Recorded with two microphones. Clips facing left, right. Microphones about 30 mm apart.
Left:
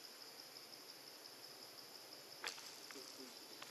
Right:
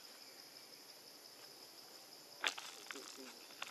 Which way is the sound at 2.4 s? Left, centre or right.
Right.